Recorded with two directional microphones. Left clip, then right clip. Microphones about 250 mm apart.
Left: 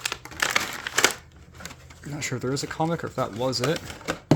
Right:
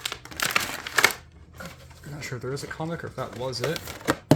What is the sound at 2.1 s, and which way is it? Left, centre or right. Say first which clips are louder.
Speech: left 4 dB; left.